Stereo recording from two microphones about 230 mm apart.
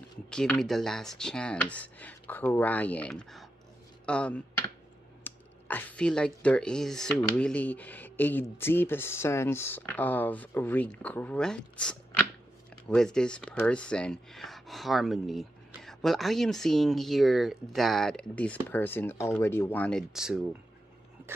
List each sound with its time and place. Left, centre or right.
0.3 s speech: centre